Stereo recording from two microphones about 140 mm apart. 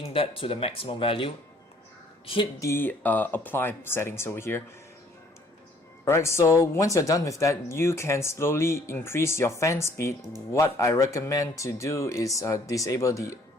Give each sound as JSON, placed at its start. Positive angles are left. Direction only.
{"t": 0.0, "sound": "speech", "side_deg": 40}
{"t": 2.6, "sound": "speech", "side_deg": 15}
{"t": 6.1, "sound": "speech", "side_deg": 20}